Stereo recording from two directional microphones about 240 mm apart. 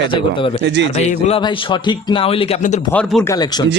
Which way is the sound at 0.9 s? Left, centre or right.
Left.